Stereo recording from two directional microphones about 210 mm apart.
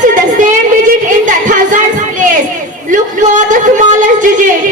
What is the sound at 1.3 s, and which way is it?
Music, 40° right (ahead or behind).